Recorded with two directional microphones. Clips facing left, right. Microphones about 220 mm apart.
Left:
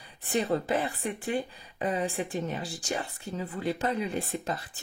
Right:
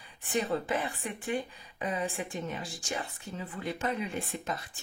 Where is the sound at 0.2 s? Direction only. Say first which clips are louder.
Left 3 dB; 35° left (ahead or behind).